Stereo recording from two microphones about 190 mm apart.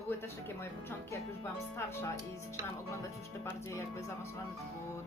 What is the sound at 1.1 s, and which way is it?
Speech, 15° left (ahead or behind).